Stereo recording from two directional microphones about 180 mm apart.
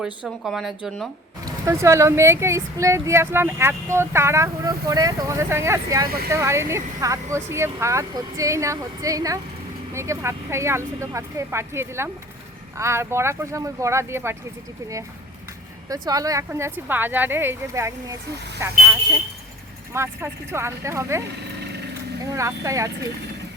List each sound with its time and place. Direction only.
0.4 s speech: centre (ahead or behind)
1.5 s speech: 15° right (ahead or behind)
15.9 s speech: 20° right (ahead or behind)
19.9 s speech: 15° right (ahead or behind)